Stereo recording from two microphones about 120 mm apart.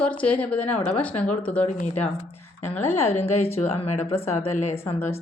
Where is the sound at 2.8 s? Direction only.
65° left (ahead or behind).